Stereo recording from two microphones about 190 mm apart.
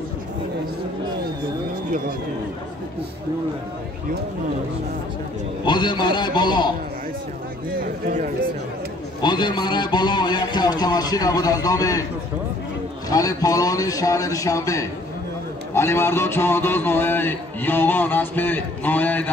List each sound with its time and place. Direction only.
5.7 s a man's voice: 25° left (ahead or behind)
7.8 s speech: 50° right (ahead or behind)
9.2 s a man's voice: 25° left (ahead or behind)
13.1 s a man's voice: 20° left (ahead or behind)